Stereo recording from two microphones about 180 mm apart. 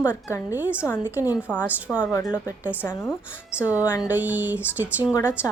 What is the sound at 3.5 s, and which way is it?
Speech, 10° right (ahead or behind).